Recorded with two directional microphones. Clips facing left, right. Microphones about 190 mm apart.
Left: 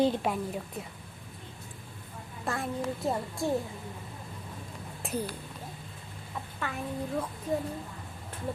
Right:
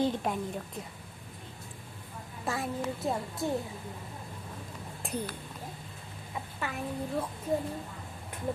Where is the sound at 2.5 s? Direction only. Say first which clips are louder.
Left 1 dB; centre (ahead or behind).